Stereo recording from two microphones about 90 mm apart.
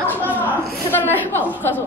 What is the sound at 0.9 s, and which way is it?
Speech, 20° left (ahead or behind).